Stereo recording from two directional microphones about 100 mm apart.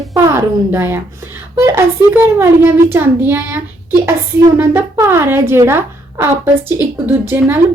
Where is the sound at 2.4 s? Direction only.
20° right (ahead or behind).